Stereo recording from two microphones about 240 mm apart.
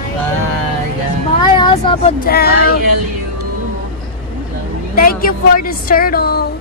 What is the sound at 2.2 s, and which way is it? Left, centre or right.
Speech, left.